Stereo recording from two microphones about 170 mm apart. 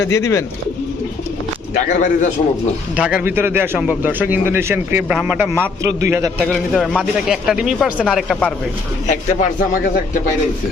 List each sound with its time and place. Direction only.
0.0 s speech: 20° left (ahead or behind)
1.9 s a man's voice: 45° left (ahead or behind)
2.9 s a man's voice: 5° right (ahead or behind)
6.5 s a man's voice: centre (ahead or behind)
9.0 s a man's voice: 45° left (ahead or behind)